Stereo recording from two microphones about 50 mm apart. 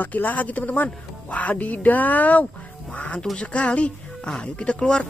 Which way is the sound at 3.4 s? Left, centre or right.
Left.